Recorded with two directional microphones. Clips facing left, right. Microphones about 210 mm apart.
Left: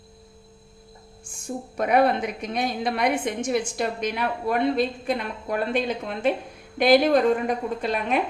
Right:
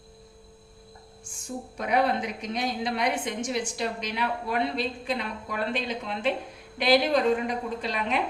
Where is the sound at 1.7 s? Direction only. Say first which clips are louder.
Left 5 dB; 55° left (ahead or behind).